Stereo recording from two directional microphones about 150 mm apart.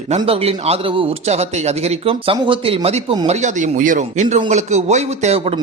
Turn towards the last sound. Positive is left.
turn(degrees=-45)  # may be behind; listen again after turning